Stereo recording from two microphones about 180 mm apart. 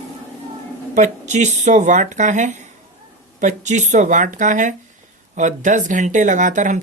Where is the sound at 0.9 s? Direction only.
40° right (ahead or behind).